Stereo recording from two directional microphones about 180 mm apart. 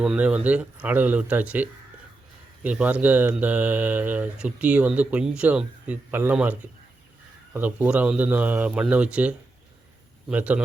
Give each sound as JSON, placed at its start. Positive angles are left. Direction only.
{"t": 0.0, "sound": "speech", "side_deg": -5}